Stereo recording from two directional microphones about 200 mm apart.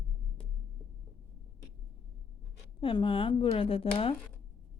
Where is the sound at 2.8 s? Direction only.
25° left (ahead or behind).